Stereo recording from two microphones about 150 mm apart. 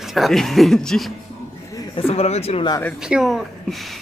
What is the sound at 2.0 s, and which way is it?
Speech, 45° left (ahead or behind).